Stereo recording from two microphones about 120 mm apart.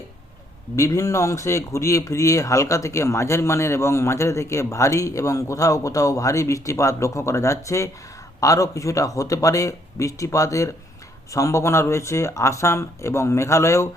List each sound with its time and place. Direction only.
0.8 s speech: 25° left (ahead or behind)